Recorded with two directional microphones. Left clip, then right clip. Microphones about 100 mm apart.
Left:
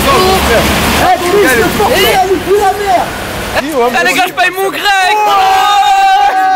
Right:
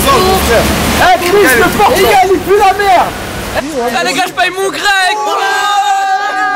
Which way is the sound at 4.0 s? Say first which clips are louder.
Left 2 dB; centre (ahead or behind).